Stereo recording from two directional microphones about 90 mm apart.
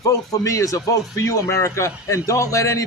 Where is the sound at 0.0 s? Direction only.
40° left (ahead or behind).